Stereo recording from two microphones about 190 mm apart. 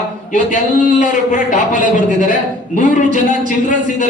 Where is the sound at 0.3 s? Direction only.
40° left (ahead or behind).